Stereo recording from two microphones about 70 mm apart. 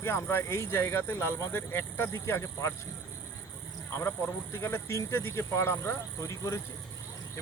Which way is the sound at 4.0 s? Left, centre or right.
Left.